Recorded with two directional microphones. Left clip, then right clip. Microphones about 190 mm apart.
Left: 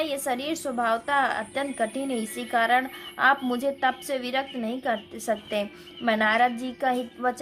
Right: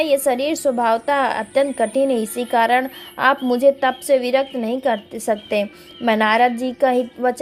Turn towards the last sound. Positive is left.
turn(degrees=-30)  # may be behind; listen again after turning